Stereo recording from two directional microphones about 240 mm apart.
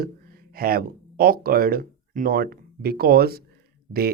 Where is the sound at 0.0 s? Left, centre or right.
Right.